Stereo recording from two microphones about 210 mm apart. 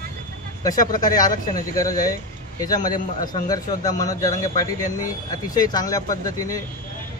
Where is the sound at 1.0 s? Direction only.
20° left (ahead or behind).